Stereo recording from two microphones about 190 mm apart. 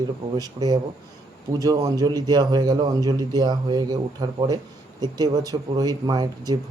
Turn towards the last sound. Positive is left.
turn(degrees=-20)  # may be behind; listen again after turning